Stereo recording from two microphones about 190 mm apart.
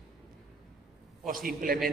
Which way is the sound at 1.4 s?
50° right (ahead or behind).